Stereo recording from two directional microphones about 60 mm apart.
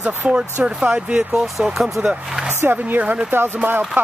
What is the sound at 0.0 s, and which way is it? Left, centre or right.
Speech, centre.